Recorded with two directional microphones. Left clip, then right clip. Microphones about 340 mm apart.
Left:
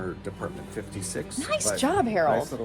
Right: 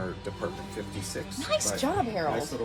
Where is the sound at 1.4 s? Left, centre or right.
Left.